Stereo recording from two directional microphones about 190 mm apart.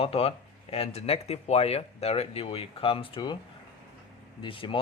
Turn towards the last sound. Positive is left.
turn(degrees=25)  # may be behind; listen again after turning